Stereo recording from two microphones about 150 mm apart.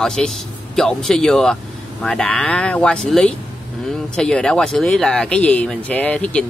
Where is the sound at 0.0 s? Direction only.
5° left (ahead or behind).